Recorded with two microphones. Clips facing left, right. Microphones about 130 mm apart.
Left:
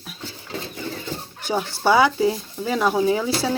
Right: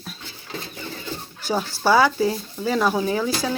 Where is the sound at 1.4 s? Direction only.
20° left (ahead or behind).